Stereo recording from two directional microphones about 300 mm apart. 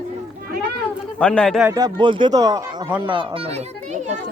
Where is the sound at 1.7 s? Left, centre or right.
Centre.